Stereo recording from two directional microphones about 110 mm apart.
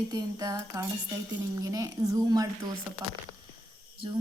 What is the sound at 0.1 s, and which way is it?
A woman's voice, 35° right (ahead or behind).